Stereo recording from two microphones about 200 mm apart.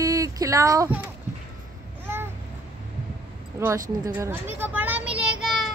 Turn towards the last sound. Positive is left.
turn(degrees=-5)  # may be behind; listen again after turning